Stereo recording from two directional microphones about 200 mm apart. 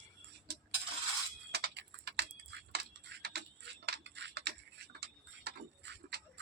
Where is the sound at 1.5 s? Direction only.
55° right (ahead or behind).